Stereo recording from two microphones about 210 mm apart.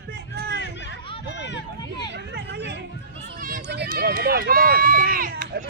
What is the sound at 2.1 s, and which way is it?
Speech, 55° right (ahead or behind).